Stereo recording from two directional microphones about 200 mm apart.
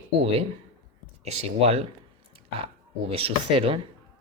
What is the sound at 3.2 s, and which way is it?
Speech, 30° right (ahead or behind).